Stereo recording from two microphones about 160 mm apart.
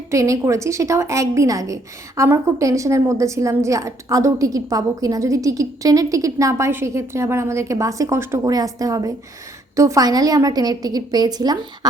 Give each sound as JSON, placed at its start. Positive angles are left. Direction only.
{"t": 0.1, "sound": "a woman's voice", "side_deg": -20}